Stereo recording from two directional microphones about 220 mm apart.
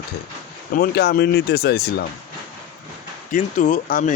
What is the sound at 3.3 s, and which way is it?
Speech, 35° left (ahead or behind).